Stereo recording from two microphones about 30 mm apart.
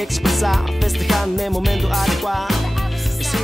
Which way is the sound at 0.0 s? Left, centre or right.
Centre.